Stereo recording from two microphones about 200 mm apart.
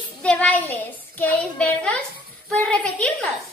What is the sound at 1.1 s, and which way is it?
A woman's voice, 5° left (ahead or behind).